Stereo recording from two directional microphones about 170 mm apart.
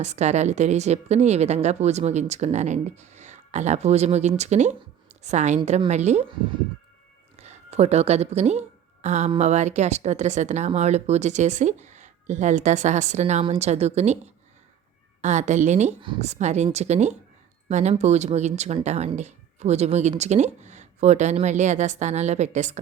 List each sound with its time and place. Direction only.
0.0 s a woman's voice: 40° right (ahead or behind)
7.3 s a woman's voice: 40° right (ahead or behind)
15.2 s a woman's voice: 45° right (ahead or behind)